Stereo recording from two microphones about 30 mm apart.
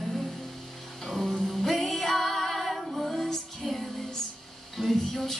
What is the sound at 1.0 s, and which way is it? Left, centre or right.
Music, centre.